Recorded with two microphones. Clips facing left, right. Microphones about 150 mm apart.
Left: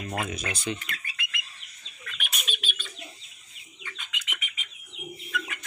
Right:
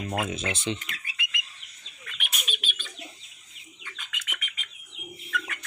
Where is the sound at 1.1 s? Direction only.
15° right (ahead or behind).